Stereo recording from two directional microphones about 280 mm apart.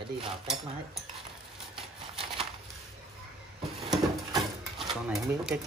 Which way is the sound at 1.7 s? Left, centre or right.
Centre.